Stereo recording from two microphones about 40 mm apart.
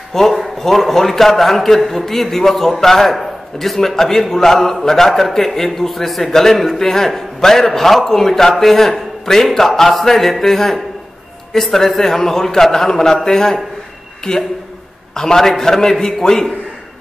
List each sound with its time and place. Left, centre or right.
0.1 s a man's voice: centre